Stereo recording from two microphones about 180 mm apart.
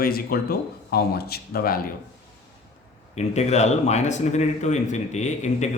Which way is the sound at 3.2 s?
40° left (ahead or behind).